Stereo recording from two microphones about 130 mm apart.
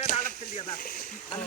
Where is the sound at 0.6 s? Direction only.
90° left.